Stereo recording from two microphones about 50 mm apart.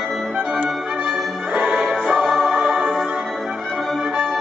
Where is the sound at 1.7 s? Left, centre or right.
Centre.